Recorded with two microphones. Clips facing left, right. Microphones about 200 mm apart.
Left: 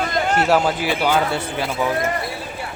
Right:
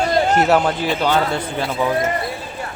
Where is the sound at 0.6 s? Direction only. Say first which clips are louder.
Right 1 dB; 10° left (ahead or behind).